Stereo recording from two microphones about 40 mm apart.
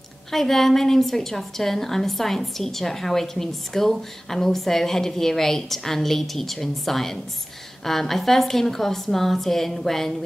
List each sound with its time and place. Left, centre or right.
0.3 s a woman's voice: centre